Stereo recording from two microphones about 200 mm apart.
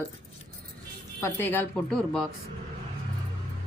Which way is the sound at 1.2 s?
10° left (ahead or behind).